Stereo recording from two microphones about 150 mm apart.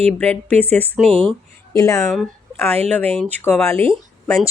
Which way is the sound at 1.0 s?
40° right (ahead or behind).